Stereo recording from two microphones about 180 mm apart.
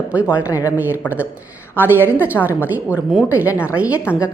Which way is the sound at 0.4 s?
20° left (ahead or behind).